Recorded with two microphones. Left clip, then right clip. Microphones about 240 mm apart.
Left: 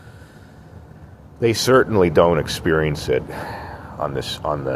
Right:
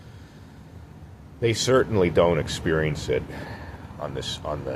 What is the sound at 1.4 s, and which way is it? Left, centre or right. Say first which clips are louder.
Speech: left 6 dB; left.